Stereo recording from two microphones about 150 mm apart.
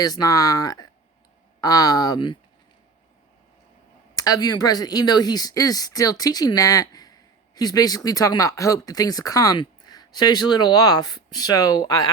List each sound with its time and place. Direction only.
0.0 s speech: 25° left (ahead or behind)
4.1 s speech: 25° left (ahead or behind)